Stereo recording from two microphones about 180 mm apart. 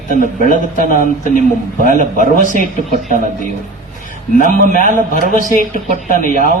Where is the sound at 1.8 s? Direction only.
45° right (ahead or behind).